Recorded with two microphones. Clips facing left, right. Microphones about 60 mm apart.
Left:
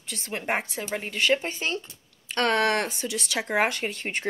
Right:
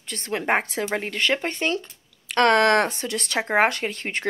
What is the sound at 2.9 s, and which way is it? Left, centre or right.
Speech, right.